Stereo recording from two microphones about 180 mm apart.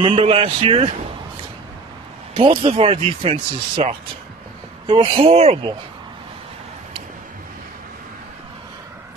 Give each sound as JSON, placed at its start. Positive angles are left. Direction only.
{"t": 0.0, "sound": "speech", "side_deg": -30}
{"t": 2.3, "sound": "speech", "side_deg": -30}